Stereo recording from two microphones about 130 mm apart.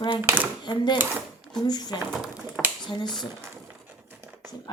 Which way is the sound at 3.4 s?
15° right (ahead or behind).